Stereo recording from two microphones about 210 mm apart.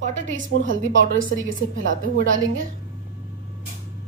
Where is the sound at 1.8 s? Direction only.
65° right (ahead or behind).